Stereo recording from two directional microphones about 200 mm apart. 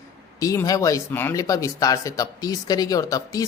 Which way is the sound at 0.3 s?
15° left (ahead or behind).